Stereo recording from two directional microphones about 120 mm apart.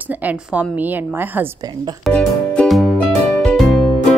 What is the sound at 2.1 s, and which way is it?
Music, 10° left (ahead or behind).